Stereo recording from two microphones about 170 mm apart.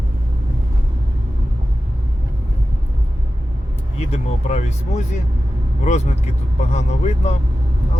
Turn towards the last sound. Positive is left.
turn(degrees=40)  # may be behind; listen again after turning